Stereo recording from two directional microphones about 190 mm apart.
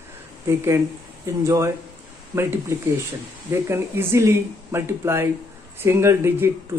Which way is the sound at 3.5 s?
15° right (ahead or behind).